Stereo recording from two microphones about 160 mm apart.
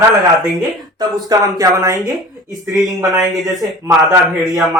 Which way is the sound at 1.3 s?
20° right (ahead or behind).